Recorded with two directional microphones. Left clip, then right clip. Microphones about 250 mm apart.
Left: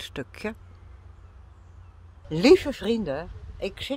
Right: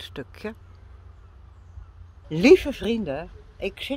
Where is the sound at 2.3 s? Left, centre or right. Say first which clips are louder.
Right 2 dB; centre.